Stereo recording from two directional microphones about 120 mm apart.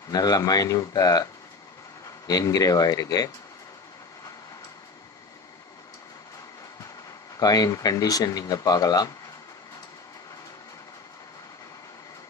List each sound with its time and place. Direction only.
0.1 s speech: 30° left (ahead or behind)
7.3 s speech: 30° left (ahead or behind)